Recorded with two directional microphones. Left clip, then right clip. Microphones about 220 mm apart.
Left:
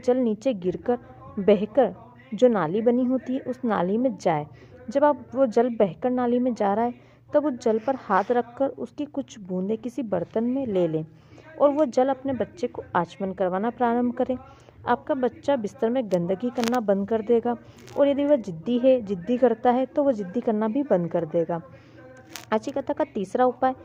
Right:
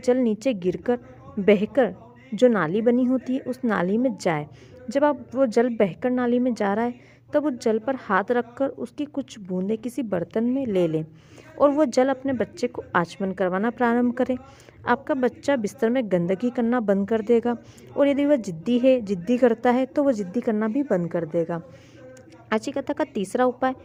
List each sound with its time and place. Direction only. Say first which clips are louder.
0.0 s a woman's voice: right 1 dB; 25° right (ahead or behind)